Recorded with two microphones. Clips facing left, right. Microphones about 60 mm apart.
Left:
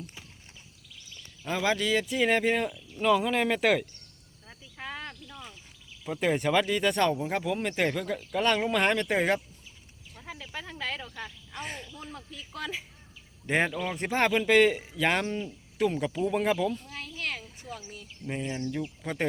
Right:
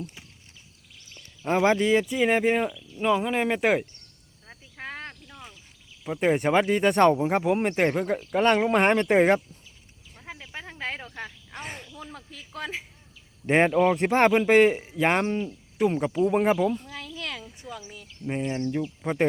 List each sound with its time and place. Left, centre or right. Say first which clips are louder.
1.5 s speech: right 6 dB; right
2.0 s speech: right 3 dB; centre
4.4 s cricket: right 2 dB; right
6.1 s speech: right 4 dB; right
10.2 s cricket: even; centre
11.0 s speech: right 2 dB; right
13.5 s speech: right 8 dB; right
17.7 s speech: right 2 dB; right
19.0 s speech: right 6 dB; right